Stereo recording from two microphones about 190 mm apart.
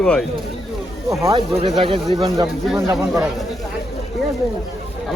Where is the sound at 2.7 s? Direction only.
15° right (ahead or behind).